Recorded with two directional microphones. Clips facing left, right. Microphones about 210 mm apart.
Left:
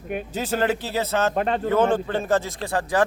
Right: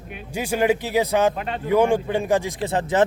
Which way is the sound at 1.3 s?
40° left (ahead or behind).